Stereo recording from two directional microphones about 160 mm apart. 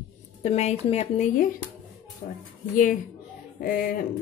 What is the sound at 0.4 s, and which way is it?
Speech, 45° left (ahead or behind).